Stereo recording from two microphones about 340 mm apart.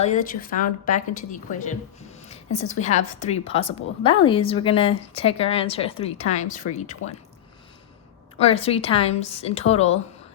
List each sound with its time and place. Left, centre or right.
0.0 s a woman's voice: left
7.0 s speech: left
8.4 s a woman's voice: centre